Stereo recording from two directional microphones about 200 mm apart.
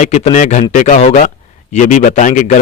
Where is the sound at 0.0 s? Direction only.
35° left (ahead or behind).